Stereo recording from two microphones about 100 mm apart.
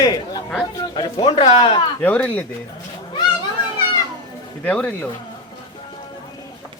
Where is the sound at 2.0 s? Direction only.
15° left (ahead or behind).